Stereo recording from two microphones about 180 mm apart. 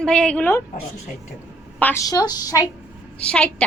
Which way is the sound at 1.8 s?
15° left (ahead or behind).